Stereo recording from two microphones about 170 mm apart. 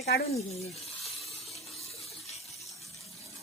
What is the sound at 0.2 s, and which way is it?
Speech, 40° left (ahead or behind).